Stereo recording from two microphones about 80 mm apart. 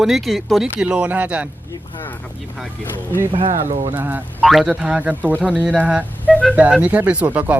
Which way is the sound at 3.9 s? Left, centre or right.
Right.